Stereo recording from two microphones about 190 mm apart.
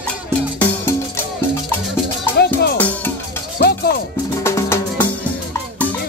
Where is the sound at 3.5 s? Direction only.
55° left (ahead or behind).